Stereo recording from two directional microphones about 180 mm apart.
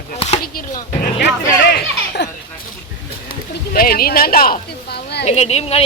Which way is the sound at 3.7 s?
55° left (ahead or behind).